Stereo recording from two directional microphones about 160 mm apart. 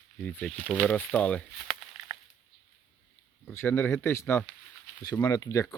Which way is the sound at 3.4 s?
15° left (ahead or behind).